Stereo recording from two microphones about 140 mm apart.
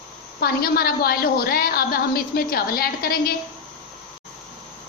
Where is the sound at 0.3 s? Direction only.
90° left.